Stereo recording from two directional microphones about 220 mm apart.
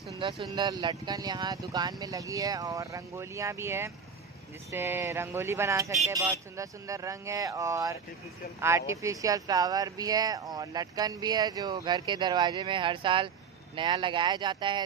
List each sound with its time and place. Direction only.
0.2 s speech: 20° right (ahead or behind)